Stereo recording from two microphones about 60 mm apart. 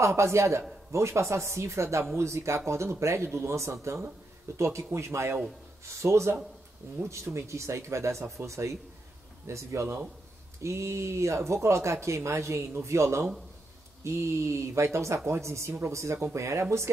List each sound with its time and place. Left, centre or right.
0.0 s speech: right